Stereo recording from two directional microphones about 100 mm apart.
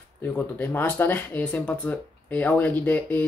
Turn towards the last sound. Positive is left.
turn(degrees=20)  # may be behind; listen again after turning